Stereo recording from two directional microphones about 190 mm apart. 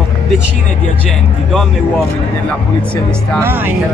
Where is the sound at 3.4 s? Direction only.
10° right (ahead or behind).